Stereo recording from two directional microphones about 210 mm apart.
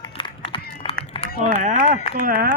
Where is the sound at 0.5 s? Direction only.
25° left (ahead or behind).